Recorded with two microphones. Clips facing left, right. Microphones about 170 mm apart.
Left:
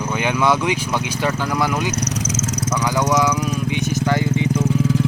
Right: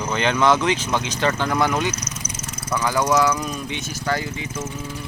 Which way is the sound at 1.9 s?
70° left (ahead or behind).